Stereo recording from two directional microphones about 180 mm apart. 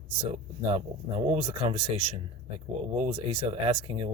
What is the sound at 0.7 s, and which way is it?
Speech, 35° right (ahead or behind).